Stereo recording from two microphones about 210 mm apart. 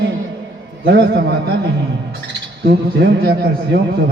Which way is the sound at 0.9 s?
50° right (ahead or behind).